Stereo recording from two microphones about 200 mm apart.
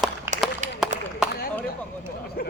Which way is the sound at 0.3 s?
10° right (ahead or behind).